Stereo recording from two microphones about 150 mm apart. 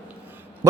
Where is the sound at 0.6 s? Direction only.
20° right (ahead or behind).